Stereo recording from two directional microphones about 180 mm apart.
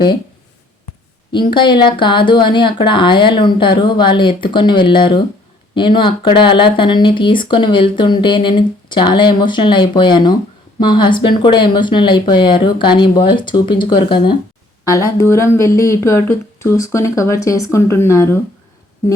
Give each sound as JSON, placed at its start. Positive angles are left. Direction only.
{"t": 1.3, "sound": "speech", "side_deg": 25}